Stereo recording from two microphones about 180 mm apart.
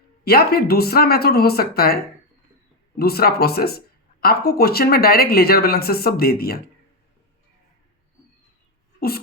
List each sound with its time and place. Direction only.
0.3 s speech: 60° left (ahead or behind)
3.0 s speech: 60° left (ahead or behind)
9.0 s a sound: 60° left (ahead or behind)